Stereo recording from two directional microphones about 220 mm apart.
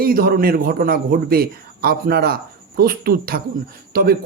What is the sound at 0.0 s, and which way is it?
A man's voice, 40° right (ahead or behind).